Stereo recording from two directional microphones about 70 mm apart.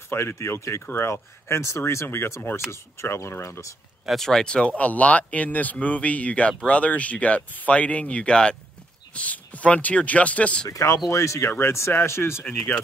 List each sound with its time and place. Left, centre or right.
0.1 s speech: left
4.1 s speech: centre
10.7 s speech: left
12.4 s speech: left